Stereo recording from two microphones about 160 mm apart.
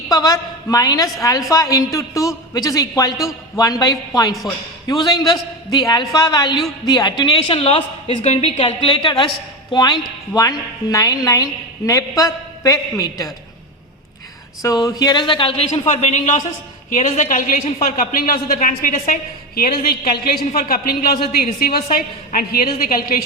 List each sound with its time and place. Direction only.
0.1 s a man's voice: 20° left (ahead or behind)
14.6 s a man's voice: 20° left (ahead or behind); by 23.2 s 60° left (ahead or behind)